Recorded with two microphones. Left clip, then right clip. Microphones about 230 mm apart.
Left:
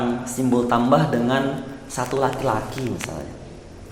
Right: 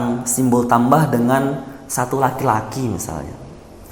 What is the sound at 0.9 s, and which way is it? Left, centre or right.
A man's voice, right.